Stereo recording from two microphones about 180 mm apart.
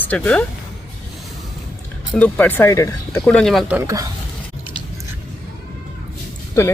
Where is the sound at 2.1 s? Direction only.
5° left (ahead or behind).